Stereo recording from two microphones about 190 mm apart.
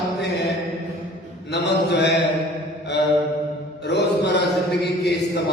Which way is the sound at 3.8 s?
65° left (ahead or behind).